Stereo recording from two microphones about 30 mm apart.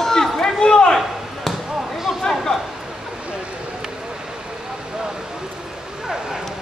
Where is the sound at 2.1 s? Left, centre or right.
Centre.